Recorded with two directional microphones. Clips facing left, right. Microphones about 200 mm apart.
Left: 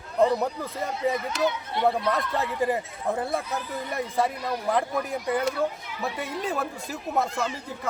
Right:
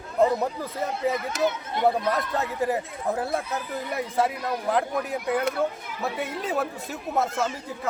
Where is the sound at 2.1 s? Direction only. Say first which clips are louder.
Even; centre (ahead or behind).